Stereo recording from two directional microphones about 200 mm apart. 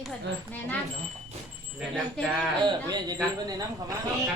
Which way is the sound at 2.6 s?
20° right (ahead or behind).